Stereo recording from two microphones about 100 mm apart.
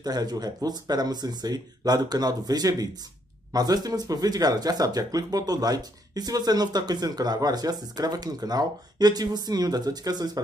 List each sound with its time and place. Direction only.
0.0 s speech: 40° right (ahead or behind)